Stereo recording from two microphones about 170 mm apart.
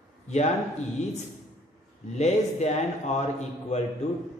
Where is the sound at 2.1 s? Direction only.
40° left (ahead or behind).